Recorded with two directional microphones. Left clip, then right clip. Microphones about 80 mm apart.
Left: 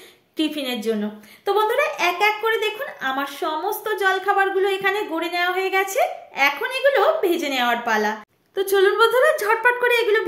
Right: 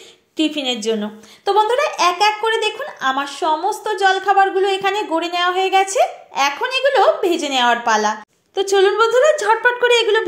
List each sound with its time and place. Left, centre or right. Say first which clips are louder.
0.4 s speech: right 5 dB; right
8.5 s a woman's voice: right 3 dB; centre